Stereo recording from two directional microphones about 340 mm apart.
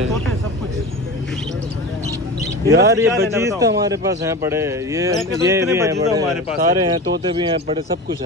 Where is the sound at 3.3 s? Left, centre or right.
Centre.